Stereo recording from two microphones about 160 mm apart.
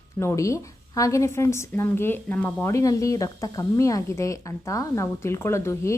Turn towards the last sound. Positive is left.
turn(degrees=15)  # may be behind; listen again after turning